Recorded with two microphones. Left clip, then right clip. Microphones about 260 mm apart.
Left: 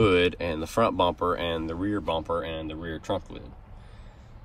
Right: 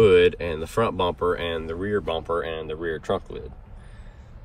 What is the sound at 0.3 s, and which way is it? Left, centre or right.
Speech, centre.